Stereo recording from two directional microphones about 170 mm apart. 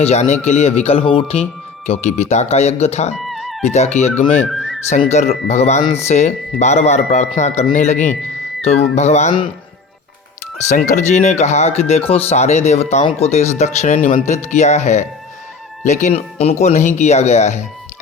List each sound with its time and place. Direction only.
0.0 s speech: 40° left (ahead or behind)
3.2 s music: centre (ahead or behind)
3.6 s speech: 40° left (ahead or behind)
4.4 s whistling: centre (ahead or behind)
4.9 s speech: 40° left (ahead or behind)
10.7 s speech: 45° left (ahead or behind)